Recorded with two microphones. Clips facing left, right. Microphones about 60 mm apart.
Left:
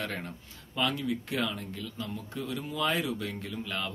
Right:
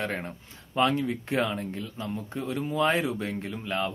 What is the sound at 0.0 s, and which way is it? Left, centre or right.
A man's voice, right.